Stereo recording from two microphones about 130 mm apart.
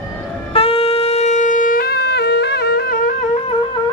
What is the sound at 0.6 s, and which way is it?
Shofar, 50° left (ahead or behind).